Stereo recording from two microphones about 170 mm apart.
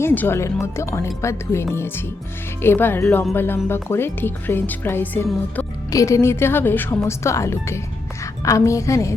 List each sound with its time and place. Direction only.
0.0 s a woman's voice: 10° left (ahead or behind)